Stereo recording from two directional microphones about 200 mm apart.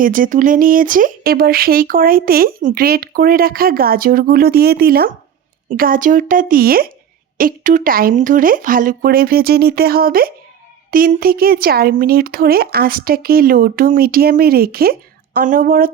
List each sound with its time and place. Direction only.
0.0 s speech: 45° right (ahead or behind)